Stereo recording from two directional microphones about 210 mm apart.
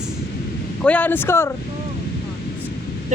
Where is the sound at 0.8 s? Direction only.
5° left (ahead or behind).